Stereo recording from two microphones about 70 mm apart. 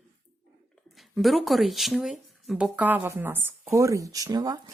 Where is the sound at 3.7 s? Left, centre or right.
Right.